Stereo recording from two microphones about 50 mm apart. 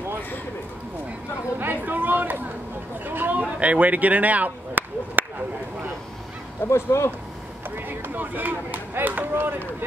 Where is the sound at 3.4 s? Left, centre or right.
Right.